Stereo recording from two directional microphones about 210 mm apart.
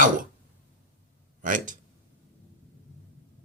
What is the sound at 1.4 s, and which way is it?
Speech, 40° right (ahead or behind).